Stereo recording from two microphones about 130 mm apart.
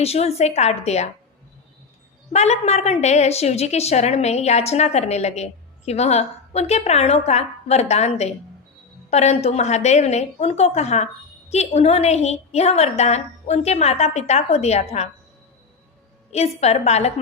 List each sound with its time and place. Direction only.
0.0 s a woman's voice: 55° left (ahead or behind)
2.3 s a woman's voice: 55° left (ahead or behind)
16.3 s a woman's voice: 55° left (ahead or behind)